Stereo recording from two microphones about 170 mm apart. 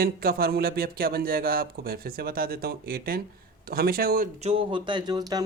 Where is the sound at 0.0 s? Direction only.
65° right (ahead or behind).